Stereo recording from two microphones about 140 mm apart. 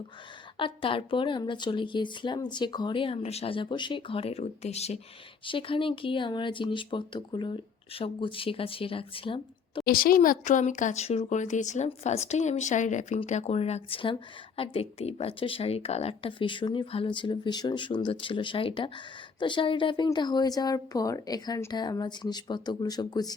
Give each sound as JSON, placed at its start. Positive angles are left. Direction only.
{"t": 0.5, "sound": "a woman's voice", "side_deg": 40}
{"t": 5.5, "sound": "a woman's voice", "side_deg": 40}
{"t": 9.8, "sound": "a woman's voice", "side_deg": 90}